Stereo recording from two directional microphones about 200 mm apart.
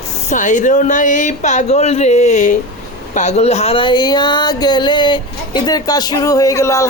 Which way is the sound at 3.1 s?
35° left (ahead or behind).